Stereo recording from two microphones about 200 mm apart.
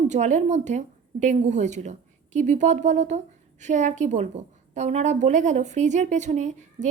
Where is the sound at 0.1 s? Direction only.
35° right (ahead or behind).